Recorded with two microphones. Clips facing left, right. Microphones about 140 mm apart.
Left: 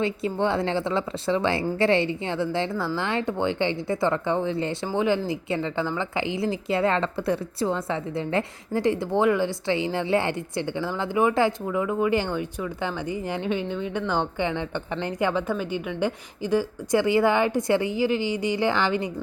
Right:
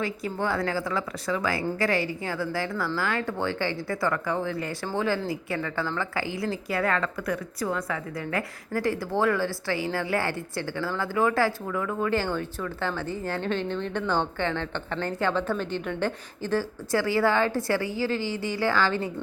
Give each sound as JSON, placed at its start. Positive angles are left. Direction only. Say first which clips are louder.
{"t": 0.0, "sound": "a woman's voice", "louder": "left 4 dB", "side_deg": 25}